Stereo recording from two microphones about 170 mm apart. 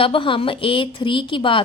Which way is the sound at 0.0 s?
30° left (ahead or behind).